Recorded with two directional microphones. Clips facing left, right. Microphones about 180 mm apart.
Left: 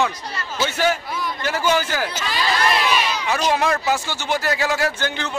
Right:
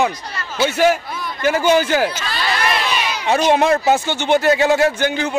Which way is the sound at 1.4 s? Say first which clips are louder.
Right 7 dB; 15° right (ahead or behind).